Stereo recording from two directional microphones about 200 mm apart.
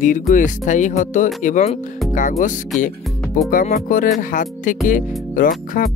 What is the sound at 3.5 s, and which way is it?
Speech, 45° left (ahead or behind).